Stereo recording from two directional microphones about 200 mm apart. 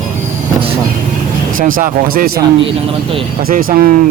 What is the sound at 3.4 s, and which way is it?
Speech, 45° right (ahead or behind).